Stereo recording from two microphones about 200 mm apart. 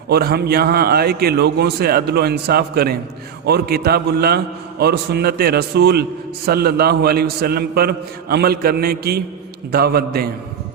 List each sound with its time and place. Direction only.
0.1 s a man's voice: 50° right (ahead or behind)